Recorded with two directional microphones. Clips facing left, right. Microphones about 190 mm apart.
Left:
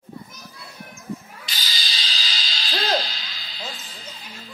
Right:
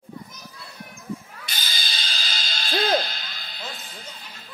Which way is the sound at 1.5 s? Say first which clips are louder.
Even; 55° right (ahead or behind).